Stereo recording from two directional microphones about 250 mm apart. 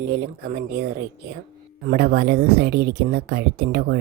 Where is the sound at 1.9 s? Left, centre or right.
Right.